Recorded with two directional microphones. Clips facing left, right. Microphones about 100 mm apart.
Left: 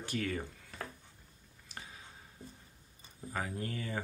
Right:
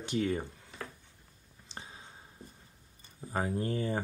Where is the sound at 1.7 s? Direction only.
25° right (ahead or behind).